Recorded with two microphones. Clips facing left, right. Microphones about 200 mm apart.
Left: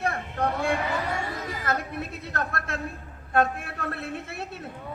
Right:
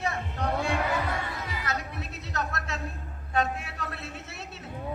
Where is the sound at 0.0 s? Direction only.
55° left (ahead or behind).